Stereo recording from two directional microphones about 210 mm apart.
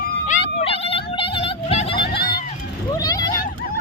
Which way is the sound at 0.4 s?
25° left (ahead or behind).